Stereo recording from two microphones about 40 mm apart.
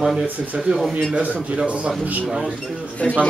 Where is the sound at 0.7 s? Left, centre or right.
Right.